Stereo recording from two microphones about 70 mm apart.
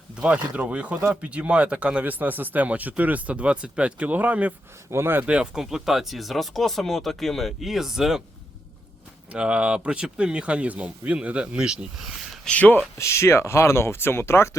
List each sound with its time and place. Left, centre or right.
0.2 s speech: centre
4.9 s speech: right
5.2 s speech: centre
9.3 s speech: centre
12.5 s speech: left
13.0 s speech: left